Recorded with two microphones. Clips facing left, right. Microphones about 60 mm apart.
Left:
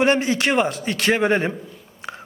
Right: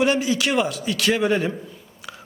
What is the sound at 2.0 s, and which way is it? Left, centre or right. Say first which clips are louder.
Biting: left 5 dB; left.